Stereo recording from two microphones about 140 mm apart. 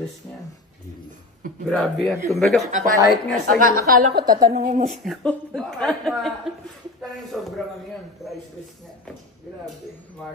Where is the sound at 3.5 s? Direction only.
80° right.